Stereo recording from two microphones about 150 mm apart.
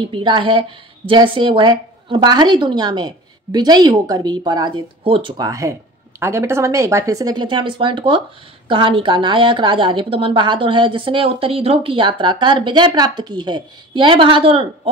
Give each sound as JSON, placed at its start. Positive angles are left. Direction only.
{"t": 0.1, "sound": "a woman's voice", "side_deg": -35}
{"t": 5.4, "sound": "a woman's voice", "side_deg": -20}